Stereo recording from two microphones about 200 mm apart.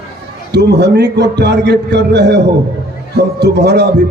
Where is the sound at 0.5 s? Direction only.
55° right (ahead or behind).